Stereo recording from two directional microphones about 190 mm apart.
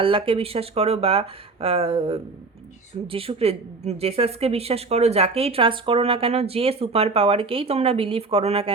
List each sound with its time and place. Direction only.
0.0 s a woman's voice: 30° right (ahead or behind)